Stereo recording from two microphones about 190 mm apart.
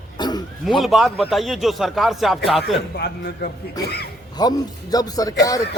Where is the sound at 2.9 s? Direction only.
60° left (ahead or behind).